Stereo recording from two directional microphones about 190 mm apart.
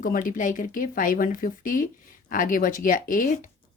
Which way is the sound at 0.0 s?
45° left (ahead or behind).